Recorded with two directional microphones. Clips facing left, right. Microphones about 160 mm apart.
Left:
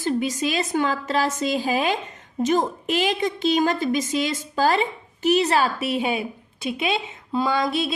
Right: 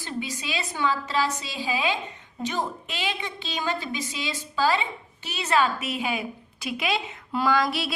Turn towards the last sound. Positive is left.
turn(degrees=25)  # may be behind; listen again after turning